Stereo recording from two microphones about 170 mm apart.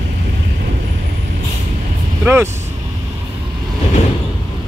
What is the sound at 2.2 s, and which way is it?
Speech, 15° right (ahead or behind).